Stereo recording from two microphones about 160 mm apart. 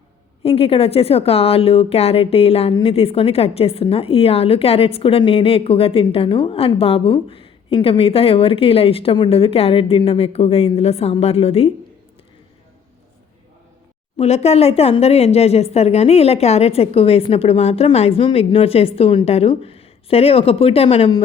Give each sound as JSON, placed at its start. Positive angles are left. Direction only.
{"t": 0.4, "sound": "a woman's voice", "side_deg": 35}
{"t": 14.2, "sound": "a woman's voice", "side_deg": 40}